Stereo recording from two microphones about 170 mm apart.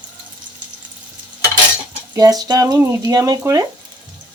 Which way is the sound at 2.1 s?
20° right (ahead or behind).